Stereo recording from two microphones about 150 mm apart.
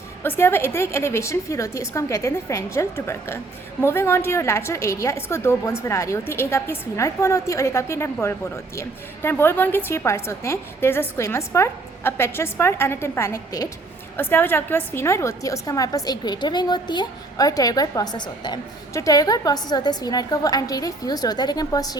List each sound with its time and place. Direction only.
0.2 s a woman's voice: 15° left (ahead or behind)